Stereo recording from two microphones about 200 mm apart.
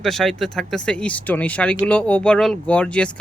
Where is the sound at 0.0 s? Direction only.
Centre (ahead or behind).